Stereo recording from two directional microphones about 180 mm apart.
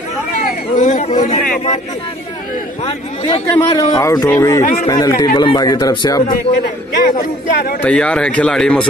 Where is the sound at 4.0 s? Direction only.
20° left (ahead or behind).